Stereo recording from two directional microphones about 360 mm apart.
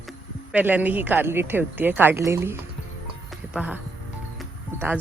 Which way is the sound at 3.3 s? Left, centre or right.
Centre.